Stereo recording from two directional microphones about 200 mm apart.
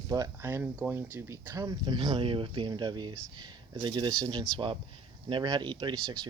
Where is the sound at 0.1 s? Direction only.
15° right (ahead or behind).